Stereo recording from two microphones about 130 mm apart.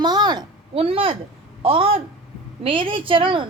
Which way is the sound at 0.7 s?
45° right (ahead or behind).